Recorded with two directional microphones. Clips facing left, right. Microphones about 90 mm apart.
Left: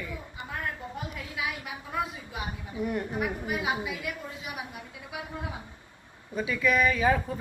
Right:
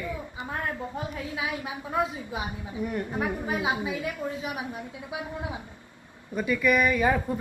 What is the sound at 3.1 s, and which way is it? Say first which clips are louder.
A woman's voice: right 2 dB; 30° right (ahead or behind).